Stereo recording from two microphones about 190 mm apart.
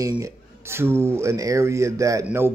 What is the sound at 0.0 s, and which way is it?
Speech, 15° right (ahead or behind).